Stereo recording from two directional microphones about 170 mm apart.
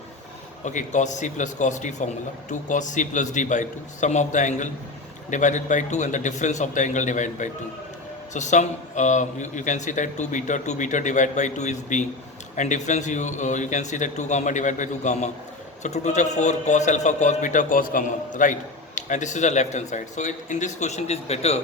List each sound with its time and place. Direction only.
0.6 s a man's voice: 45° left (ahead or behind)